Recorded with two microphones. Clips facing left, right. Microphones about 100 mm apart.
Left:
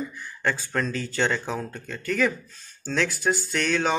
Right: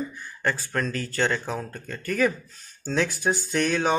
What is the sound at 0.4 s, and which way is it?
Speech, centre (ahead or behind).